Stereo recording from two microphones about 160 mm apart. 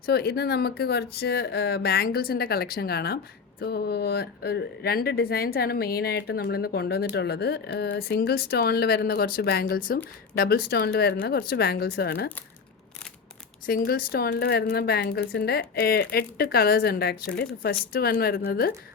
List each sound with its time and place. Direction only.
0.0 s speech: 80° left
3.6 s speech: 90° left
13.7 s a woman's voice: 65° left (ahead or behind)